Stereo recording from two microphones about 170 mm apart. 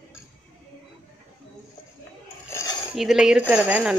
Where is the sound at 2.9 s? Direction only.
Centre (ahead or behind).